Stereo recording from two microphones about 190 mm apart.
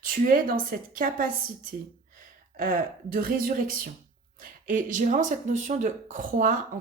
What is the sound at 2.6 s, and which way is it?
Speech, 50° right (ahead or behind).